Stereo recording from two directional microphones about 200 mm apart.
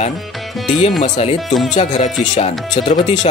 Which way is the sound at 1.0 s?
35° left (ahead or behind).